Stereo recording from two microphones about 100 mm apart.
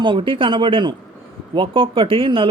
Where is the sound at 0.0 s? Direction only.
55° right (ahead or behind).